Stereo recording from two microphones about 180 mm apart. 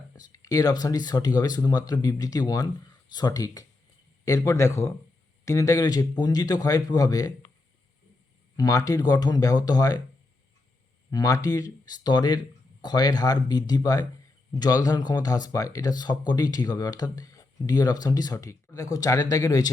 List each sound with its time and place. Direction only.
0.2 s speech: 20° left (ahead or behind)
8.5 s speech: 20° left (ahead or behind)
11.1 s speech: 20° left (ahead or behind)